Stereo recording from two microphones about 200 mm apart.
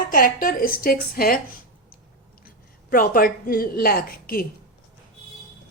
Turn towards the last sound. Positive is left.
turn(degrees=45)  # may be behind; listen again after turning